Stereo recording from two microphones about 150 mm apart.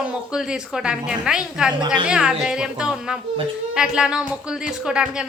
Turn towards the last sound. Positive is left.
turn(degrees=-5)  # may be behind; listen again after turning